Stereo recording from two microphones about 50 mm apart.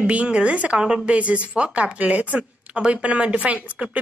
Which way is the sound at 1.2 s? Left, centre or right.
Right.